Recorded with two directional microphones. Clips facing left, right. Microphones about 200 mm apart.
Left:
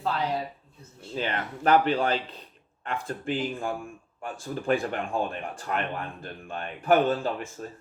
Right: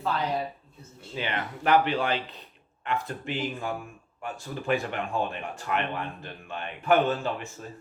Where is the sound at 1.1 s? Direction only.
40° left (ahead or behind).